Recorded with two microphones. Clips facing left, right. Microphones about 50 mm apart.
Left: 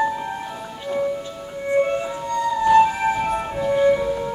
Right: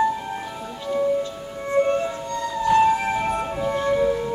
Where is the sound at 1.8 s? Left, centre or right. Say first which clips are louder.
Even; centre.